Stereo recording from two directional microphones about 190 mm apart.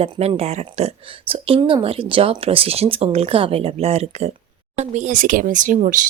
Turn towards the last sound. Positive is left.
turn(degrees=-40)  # may be behind; listen again after turning